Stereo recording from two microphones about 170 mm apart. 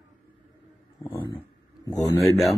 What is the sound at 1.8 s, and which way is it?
Speech, 20° left (ahead or behind).